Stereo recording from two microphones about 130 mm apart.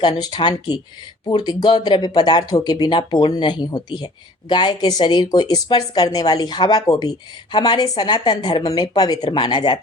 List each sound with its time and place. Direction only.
0.0 s speech: 35° left (ahead or behind)